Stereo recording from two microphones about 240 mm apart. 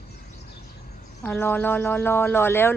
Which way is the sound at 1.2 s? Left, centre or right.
Centre.